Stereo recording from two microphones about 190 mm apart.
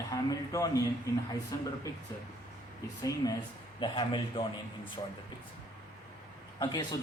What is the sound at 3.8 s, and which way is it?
Speech, 25° left (ahead or behind).